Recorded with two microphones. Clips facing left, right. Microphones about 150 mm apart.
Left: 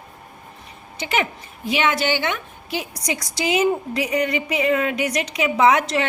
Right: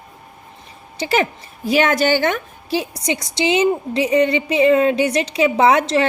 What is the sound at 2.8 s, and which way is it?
A woman's voice, 25° right (ahead or behind).